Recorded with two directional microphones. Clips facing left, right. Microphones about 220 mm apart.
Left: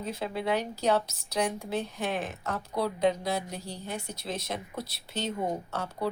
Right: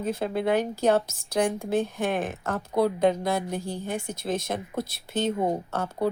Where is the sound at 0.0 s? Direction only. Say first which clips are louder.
Right 6 dB; 50° right (ahead or behind).